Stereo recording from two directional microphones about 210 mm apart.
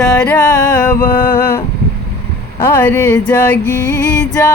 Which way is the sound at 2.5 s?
10° left (ahead or behind).